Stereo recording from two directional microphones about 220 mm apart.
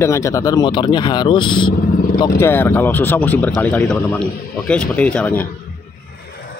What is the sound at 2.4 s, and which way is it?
Speech, 10° left (ahead or behind).